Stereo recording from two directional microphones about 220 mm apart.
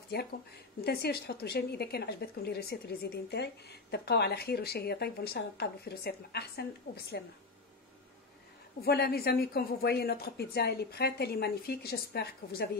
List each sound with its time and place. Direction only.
0.1 s a woman's voice: 50° left (ahead or behind)
8.8 s a woman's voice: 45° left (ahead or behind)